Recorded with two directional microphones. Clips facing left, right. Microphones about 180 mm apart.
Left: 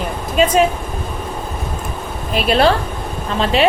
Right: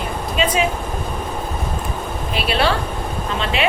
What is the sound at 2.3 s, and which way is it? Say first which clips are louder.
A woman's voice: left 6 dB; 45° left (ahead or behind).